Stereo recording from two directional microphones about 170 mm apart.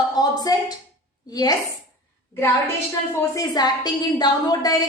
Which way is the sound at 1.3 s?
20° left (ahead or behind).